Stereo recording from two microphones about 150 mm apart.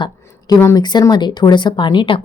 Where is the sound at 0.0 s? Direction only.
25° left (ahead or behind).